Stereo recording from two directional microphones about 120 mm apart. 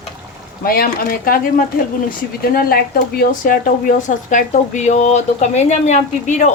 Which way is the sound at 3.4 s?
90° left.